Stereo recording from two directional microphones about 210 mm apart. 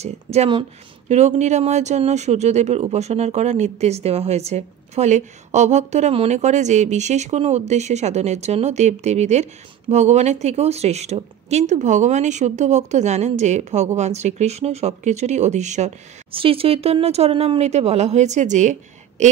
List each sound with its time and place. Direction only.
0.0 s speech: 30° right (ahead or behind)